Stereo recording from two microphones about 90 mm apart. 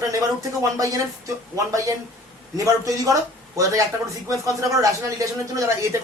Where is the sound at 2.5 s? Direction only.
40° right (ahead or behind).